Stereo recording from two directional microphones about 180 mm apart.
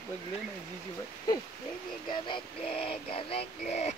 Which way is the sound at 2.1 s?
30° left (ahead or behind).